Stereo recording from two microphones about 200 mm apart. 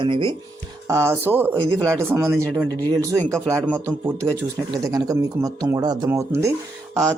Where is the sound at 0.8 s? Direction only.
10° right (ahead or behind).